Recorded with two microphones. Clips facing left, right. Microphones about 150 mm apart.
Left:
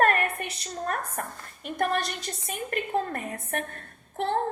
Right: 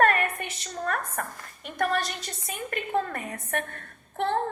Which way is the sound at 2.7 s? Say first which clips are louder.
Even; 40° left (ahead or behind).